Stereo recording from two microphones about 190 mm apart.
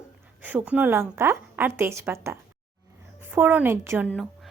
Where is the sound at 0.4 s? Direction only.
10° right (ahead or behind).